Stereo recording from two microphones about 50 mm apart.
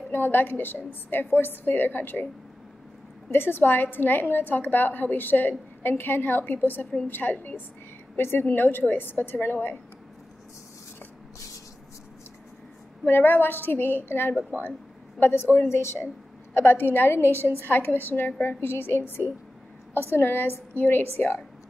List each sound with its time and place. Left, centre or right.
0.1 s a woman's voice: left
3.3 s a woman's voice: left
8.2 s a woman's voice: left
8.5 s a woman's voice: left
13.0 s a woman's voice: left